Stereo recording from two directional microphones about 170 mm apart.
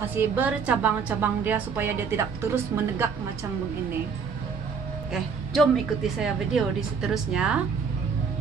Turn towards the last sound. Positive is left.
turn(degrees=-5)  # may be behind; listen again after turning